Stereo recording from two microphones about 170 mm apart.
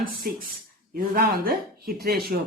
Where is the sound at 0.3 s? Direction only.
60° right (ahead or behind).